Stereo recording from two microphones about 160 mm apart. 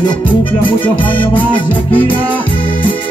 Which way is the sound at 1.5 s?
30° left (ahead or behind).